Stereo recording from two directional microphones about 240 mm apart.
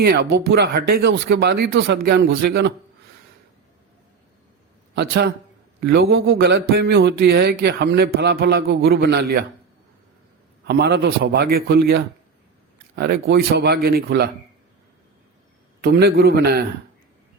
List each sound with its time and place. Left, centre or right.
0.0 s speech: right
4.9 s speech: right
10.7 s speech: right
15.8 s a man's voice: right